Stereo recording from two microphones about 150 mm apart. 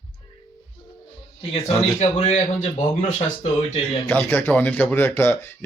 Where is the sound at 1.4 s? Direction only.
45° left (ahead or behind).